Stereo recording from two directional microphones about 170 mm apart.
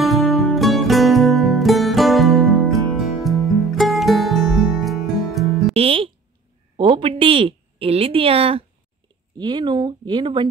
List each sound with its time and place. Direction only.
0.0 s music: centre (ahead or behind)
5.7 s music: 35° right (ahead or behind)
6.8 s speech: 30° right (ahead or behind)